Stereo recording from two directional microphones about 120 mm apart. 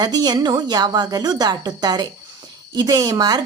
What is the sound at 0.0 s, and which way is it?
Speech, 35° right (ahead or behind).